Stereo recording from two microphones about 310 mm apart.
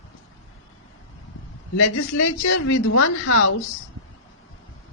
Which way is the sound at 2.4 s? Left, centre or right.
Left.